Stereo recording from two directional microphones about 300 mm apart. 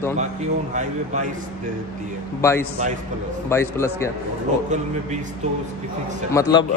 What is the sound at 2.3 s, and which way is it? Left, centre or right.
A man's voice, centre.